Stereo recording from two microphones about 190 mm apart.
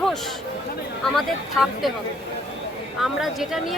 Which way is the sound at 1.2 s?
Centre (ahead or behind).